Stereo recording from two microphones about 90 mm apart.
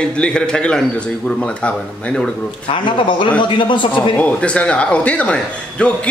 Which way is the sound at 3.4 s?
65° left (ahead or behind).